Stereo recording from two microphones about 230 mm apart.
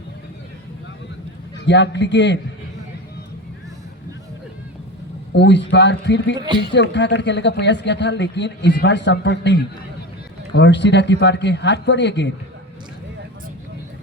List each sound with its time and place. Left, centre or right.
1.6 s a man's voice: left
5.3 s a man's voice: left